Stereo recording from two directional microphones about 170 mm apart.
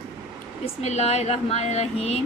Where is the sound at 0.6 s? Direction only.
40° left (ahead or behind).